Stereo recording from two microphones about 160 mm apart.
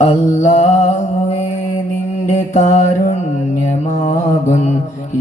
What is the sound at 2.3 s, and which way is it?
Mantra, 50° left (ahead or behind).